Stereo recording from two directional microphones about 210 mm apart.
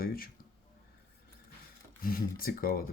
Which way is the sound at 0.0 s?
45° left (ahead or behind).